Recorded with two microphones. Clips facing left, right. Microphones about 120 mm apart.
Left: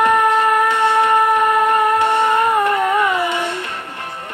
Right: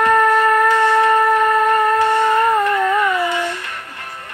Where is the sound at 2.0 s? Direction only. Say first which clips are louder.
Right 1 dB; 20° left (ahead or behind).